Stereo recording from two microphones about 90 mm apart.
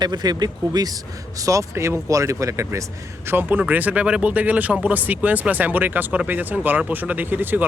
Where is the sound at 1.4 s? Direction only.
35° right (ahead or behind).